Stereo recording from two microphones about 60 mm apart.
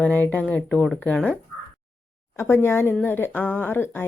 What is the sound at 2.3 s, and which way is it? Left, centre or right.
Speech, left.